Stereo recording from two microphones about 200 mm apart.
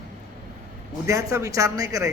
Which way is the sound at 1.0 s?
15° right (ahead or behind).